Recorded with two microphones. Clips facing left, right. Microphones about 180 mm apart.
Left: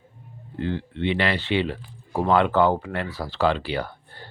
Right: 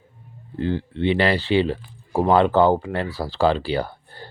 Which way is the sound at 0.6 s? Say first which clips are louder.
Right 4 dB; 35° right (ahead or behind).